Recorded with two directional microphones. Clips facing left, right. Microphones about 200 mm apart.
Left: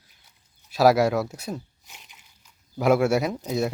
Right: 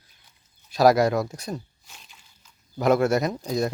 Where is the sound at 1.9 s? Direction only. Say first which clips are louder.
Even; 15° left (ahead or behind).